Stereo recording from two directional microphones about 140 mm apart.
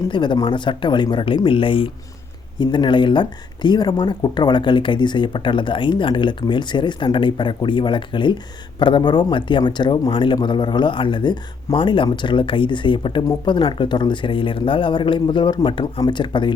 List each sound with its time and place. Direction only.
0.1 s speech: 35° left (ahead or behind)